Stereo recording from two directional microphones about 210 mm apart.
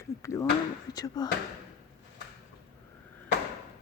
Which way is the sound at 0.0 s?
15° left (ahead or behind).